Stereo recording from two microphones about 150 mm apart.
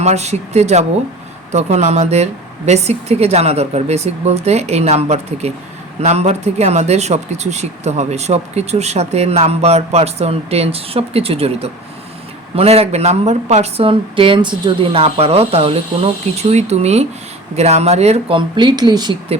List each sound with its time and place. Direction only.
0.0 s speech: 45° right (ahead or behind); by 19.1 s 30° right (ahead or behind)